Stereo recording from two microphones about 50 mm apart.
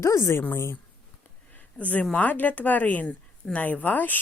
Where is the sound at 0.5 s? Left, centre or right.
Left.